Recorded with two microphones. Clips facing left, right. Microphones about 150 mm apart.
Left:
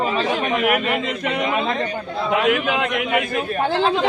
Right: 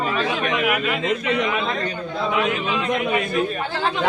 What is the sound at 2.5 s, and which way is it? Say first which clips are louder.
Speech: left 3 dB; 70° left (ahead or behind).